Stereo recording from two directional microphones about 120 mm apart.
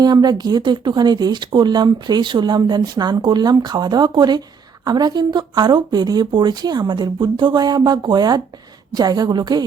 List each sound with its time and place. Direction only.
0.0 s speech: 35° right (ahead or behind)